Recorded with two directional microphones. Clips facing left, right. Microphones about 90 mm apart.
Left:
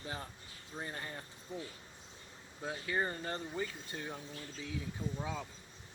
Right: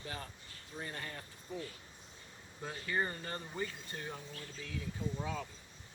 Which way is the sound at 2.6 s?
10° left (ahead or behind).